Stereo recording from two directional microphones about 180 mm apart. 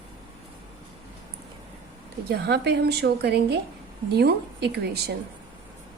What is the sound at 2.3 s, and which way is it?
A woman's voice, 65° right (ahead or behind).